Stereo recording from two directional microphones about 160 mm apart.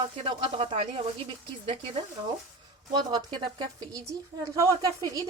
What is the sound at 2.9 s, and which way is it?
A woman's voice, 25° right (ahead or behind).